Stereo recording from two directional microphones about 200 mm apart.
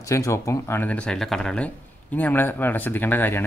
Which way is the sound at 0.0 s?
15° left (ahead or behind).